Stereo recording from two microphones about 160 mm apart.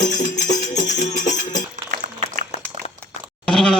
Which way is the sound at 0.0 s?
50° left (ahead or behind).